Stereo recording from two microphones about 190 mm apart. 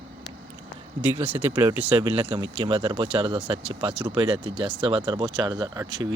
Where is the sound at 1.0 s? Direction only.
10° right (ahead or behind).